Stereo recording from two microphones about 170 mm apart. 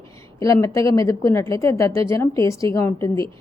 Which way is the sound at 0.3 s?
20° left (ahead or behind).